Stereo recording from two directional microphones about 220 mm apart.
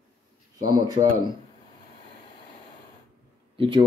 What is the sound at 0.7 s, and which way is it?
Speech, 15° right (ahead or behind).